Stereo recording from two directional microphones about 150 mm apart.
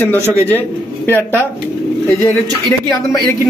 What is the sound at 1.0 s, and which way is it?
Speech, 15° left (ahead or behind).